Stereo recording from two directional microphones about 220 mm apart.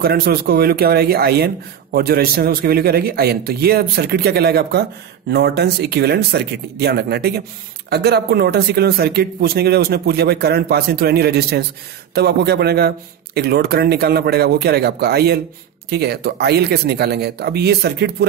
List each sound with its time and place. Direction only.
0.0 s speech: 45° right (ahead or behind)